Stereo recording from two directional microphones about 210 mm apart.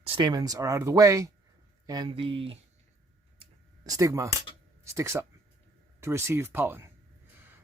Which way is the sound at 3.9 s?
15° right (ahead or behind).